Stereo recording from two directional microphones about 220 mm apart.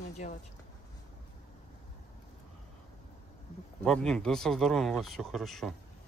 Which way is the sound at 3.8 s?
5° left (ahead or behind).